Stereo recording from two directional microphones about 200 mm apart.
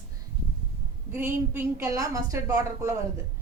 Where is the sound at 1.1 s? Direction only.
10° right (ahead or behind).